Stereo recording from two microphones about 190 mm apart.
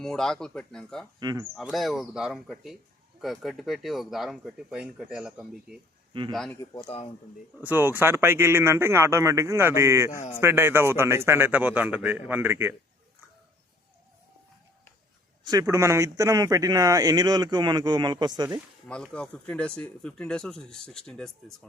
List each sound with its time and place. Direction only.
0.0 s speech: centre (ahead or behind)
1.2 s speech: 20° right (ahead or behind)
1.5 s speech: centre (ahead or behind)
6.6 s speech: 25° left (ahead or behind)
7.6 s speech: 10° right (ahead or behind)
10.2 s speech: 35° left (ahead or behind)
10.4 s speech: 10° right (ahead or behind)
15.4 s speech: 15° right (ahead or behind)
19.1 s speech: 5° left (ahead or behind)